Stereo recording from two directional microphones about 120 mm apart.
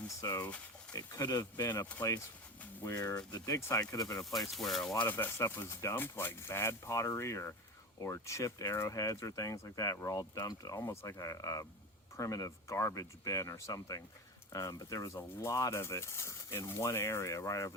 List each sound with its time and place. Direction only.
0.2 s speech: 30° left (ahead or behind)
4.4 s speech: centre (ahead or behind); by 17.7 s 25° left (ahead or behind)